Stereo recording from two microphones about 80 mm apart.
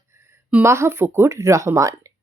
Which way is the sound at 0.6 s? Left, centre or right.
Right.